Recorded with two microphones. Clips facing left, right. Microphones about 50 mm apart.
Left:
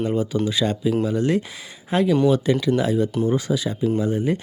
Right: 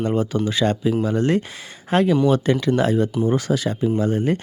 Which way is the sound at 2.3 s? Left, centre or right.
Right.